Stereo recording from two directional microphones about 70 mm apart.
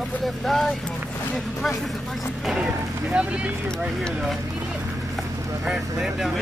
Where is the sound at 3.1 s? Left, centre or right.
Centre.